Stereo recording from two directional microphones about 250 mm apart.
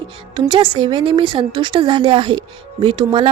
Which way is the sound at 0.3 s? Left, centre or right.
Centre.